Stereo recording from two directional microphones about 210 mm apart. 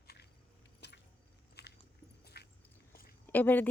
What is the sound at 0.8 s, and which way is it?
Squish, 55° left (ahead or behind).